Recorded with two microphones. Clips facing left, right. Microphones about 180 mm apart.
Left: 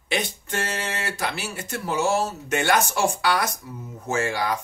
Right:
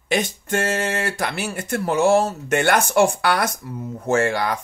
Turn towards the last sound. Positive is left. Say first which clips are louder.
# right 5 dB
turn(degrees=-60)  # may be behind; listen again after turning